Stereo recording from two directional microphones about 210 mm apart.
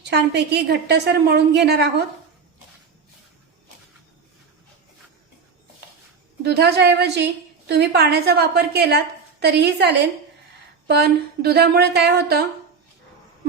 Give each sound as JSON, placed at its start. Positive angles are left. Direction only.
{"t": 0.0, "sound": "a woman's voice", "side_deg": -50}
{"t": 6.4, "sound": "a woman's voice", "side_deg": -50}